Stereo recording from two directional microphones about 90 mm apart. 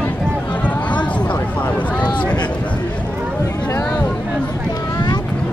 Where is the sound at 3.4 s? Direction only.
30° left (ahead or behind).